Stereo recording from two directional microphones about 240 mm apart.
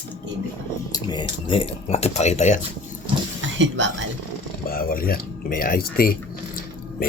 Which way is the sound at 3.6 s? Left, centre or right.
Right.